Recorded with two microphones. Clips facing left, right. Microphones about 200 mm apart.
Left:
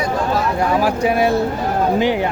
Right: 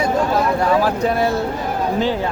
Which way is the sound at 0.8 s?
10° left (ahead or behind).